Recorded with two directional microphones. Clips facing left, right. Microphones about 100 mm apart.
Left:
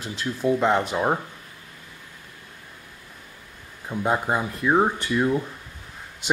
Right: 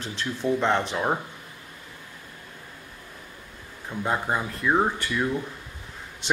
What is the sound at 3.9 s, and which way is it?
Speech, 15° left (ahead or behind).